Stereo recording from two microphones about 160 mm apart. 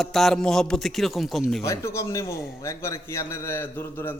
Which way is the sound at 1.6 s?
20° left (ahead or behind).